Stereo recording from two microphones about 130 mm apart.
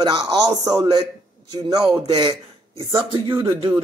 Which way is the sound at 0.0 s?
30° right (ahead or behind).